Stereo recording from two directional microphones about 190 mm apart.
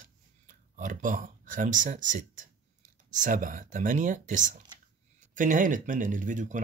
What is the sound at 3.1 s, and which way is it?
Speech, 45° right (ahead or behind).